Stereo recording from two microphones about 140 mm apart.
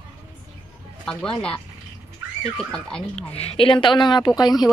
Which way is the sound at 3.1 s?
45° left (ahead or behind).